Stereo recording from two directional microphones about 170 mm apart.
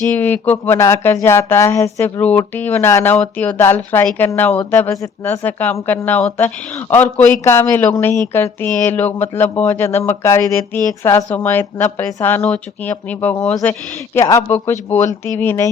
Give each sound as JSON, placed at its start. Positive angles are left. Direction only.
{"t": 0.2, "sound": "speech", "side_deg": 10}